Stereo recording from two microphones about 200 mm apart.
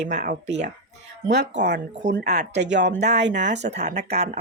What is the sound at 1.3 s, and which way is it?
Speech, 60° right (ahead or behind).